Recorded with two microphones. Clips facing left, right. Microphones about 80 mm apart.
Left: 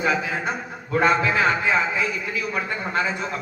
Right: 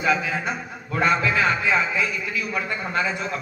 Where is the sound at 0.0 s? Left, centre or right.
Left.